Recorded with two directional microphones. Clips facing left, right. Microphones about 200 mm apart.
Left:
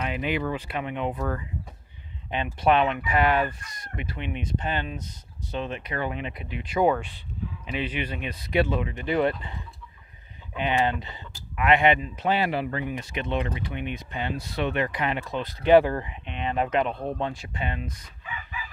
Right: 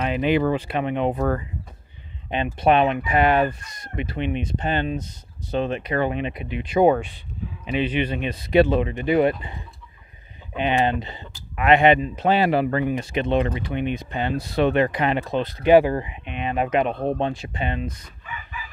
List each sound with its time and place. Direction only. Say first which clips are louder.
0.0 s a sound: right 7 dB; 30° right (ahead or behind)
0.4 s speech: right 7 dB; 30° right (ahead or behind)
1.1 s speech: right 7 dB; 55° right (ahead or behind)
2.3 s speech: right 4 dB; 20° right (ahead or behind)
6.0 s speech: right 6 dB; 20° right (ahead or behind)
9.0 s speech: right 4 dB; 15° right (ahead or behind)
15.6 s speech: right 2 dB; 10° right (ahead or behind)
16.9 s speech: right 7 dB; 65° right (ahead or behind)
17.2 s speech: right 5 dB; 25° right (ahead or behind)